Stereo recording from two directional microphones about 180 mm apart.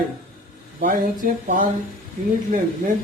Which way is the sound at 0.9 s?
50° right (ahead or behind).